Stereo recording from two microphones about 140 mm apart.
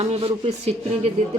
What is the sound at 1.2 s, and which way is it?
Speech, 50° right (ahead or behind).